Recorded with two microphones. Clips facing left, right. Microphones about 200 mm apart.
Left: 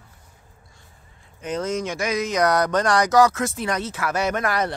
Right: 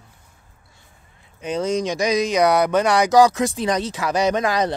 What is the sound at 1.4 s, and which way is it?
Speech, 15° right (ahead or behind).